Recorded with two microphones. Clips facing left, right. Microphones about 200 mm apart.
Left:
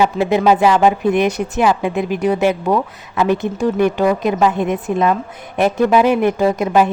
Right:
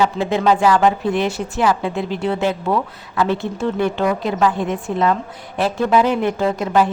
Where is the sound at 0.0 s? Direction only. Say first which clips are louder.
Left 3 dB; 10° left (ahead or behind).